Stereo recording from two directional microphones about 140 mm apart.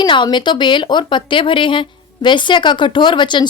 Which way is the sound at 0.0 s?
35° left (ahead or behind).